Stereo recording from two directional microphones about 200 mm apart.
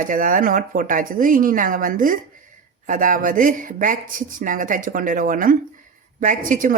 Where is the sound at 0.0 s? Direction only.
45° right (ahead or behind).